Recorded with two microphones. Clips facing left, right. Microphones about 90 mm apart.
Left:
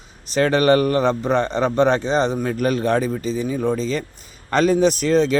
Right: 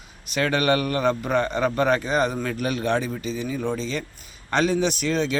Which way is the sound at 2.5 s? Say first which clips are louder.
Left 5 dB; 40° left (ahead or behind).